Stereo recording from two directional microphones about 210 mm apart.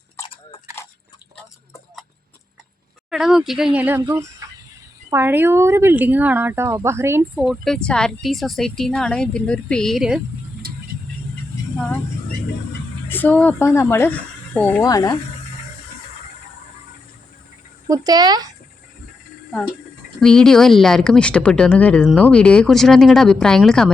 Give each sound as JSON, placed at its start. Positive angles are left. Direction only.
{"t": 3.1, "sound": "speech", "side_deg": 0}
{"t": 13.1, "sound": "speech", "side_deg": 10}
{"t": 17.8, "sound": "speech", "side_deg": -15}
{"t": 20.1, "sound": "speech", "side_deg": 5}